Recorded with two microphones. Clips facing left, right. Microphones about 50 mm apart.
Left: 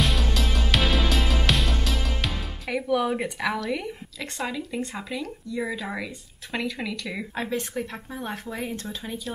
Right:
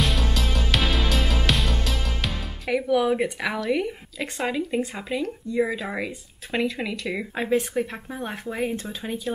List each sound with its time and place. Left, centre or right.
0.0 s music: centre
4.7 s speech: centre